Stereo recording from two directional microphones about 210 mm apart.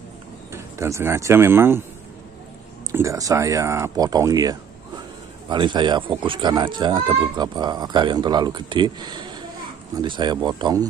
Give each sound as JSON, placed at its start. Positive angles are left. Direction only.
{"t": 0.5, "sound": "speech", "side_deg": -15}
{"t": 2.9, "sound": "speech", "side_deg": -15}